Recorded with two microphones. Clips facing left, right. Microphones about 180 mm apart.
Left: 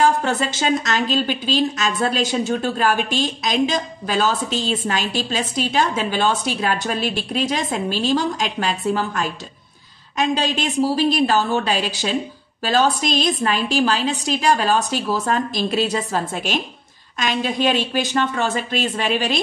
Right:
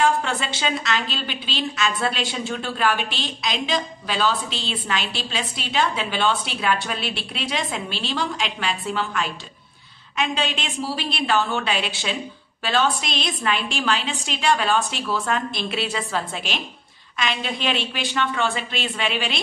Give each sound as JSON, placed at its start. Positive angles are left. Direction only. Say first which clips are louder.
{"t": 0.0, "sound": "a woman's voice", "louder": "left 3 dB", "side_deg": 40}